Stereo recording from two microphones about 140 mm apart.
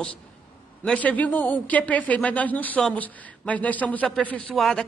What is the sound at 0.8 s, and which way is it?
Speech, 10° left (ahead or behind).